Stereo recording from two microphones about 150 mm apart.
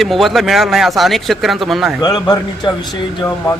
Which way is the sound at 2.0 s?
25° left (ahead or behind).